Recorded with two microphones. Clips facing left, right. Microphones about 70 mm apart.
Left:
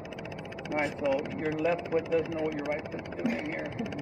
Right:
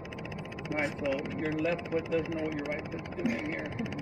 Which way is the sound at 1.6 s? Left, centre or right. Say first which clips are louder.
Left 6 dB; centre.